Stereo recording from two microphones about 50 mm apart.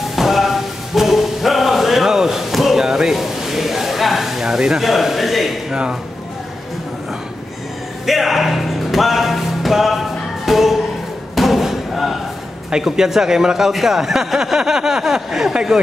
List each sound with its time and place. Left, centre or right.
0.1 s a sound: centre
5.7 s speech: centre
8.1 s music: centre
11.3 s slam: centre
12.7 s speech: centre